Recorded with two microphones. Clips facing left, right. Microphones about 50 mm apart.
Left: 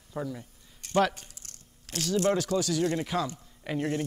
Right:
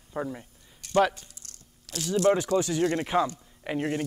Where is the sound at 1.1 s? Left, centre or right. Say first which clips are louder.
Even; left.